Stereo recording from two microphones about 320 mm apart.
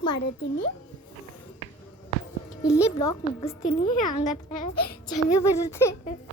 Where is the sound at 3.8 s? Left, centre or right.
Left.